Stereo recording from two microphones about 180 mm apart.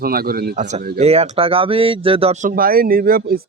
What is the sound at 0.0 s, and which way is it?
Speech, 55° right (ahead or behind).